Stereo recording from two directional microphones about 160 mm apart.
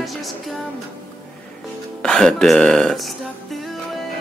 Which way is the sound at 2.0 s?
5° left (ahead or behind).